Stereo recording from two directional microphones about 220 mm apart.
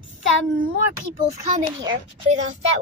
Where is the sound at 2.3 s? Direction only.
30° right (ahead or behind).